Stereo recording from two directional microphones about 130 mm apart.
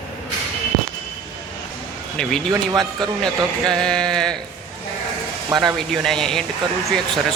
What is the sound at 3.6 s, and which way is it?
Speech, 5° left (ahead or behind).